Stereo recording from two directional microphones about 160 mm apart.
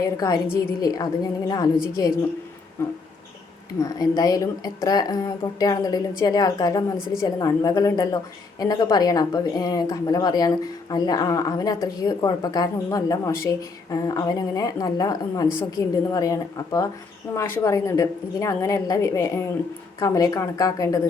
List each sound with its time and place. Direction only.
0.0 s a woman's voice: 25° left (ahead or behind)
2.8 s a sound: 15° left (ahead or behind)
3.8 s a woman's voice: 20° left (ahead or behind)